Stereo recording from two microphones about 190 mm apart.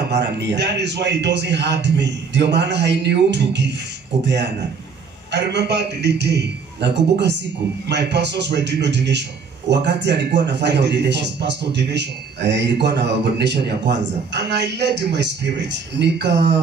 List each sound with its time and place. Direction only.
0.1 s a man's voice: 65° right (ahead or behind)
5.3 s a man's voice: 65° right (ahead or behind)